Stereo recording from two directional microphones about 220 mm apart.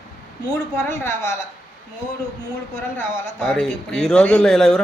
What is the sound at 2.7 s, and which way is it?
Speech, 35° right (ahead or behind).